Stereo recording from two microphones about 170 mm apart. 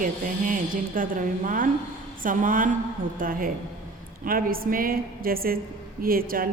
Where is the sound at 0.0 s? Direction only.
50° right (ahead or behind).